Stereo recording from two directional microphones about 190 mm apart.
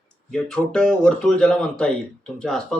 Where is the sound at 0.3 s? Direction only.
5° left (ahead or behind).